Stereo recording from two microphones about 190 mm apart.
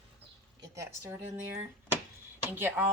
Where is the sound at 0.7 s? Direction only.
15° right (ahead or behind).